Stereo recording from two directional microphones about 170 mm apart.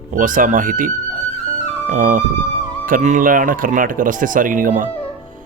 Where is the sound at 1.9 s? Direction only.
50° right (ahead or behind).